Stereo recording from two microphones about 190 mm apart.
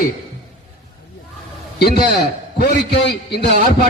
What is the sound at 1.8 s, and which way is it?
A man's voice, 55° left (ahead or behind).